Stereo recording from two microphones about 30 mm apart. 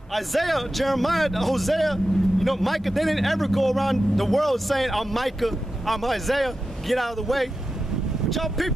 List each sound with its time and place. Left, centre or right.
0.1 s a man's voice: centre